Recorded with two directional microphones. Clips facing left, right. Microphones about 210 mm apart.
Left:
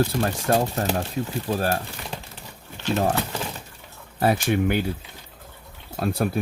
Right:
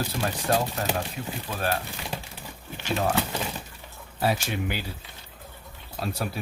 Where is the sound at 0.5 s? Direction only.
45° left (ahead or behind).